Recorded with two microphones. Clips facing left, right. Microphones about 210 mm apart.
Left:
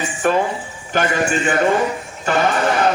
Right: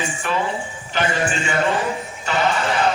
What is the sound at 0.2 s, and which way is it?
Speech, 50° left (ahead or behind).